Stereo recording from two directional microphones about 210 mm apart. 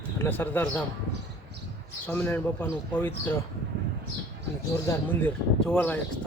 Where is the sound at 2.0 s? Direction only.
10° left (ahead or behind).